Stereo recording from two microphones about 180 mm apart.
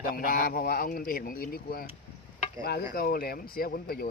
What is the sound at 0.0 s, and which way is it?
Speech, 50° left (ahead or behind).